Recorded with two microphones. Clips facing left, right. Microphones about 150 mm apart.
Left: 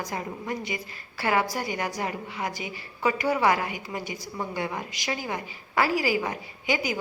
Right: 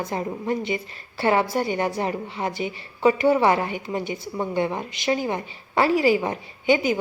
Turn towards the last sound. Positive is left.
turn(degrees=-25)  # may be behind; listen again after turning